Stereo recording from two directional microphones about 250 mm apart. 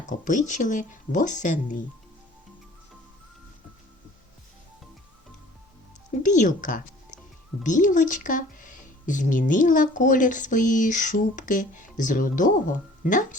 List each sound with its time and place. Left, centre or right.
0.1 s speech: left
6.2 s speech: left